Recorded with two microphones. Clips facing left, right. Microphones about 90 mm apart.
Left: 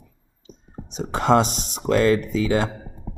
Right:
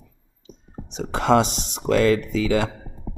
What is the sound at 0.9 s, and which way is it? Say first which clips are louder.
Speech: even; 40° left (ahead or behind).